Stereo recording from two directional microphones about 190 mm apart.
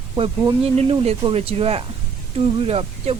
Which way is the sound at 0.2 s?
30° right (ahead or behind).